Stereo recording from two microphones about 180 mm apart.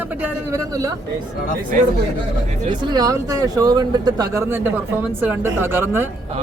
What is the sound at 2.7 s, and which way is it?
Speech, 20° right (ahead or behind).